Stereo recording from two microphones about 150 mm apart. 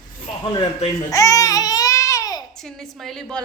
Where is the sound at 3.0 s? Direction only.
Centre (ahead or behind).